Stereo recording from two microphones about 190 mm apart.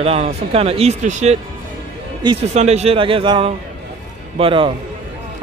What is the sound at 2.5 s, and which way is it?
A man's voice, 35° right (ahead or behind).